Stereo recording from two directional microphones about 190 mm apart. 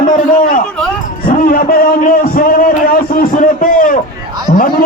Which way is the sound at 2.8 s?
50° left (ahead or behind).